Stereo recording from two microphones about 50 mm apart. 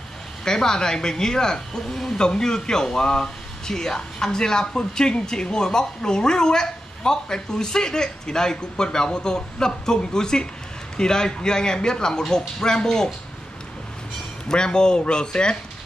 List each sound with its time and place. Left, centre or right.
0.5 s speech: centre
14.5 s speech: centre